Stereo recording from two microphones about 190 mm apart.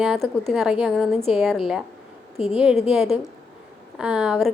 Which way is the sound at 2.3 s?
35° left (ahead or behind).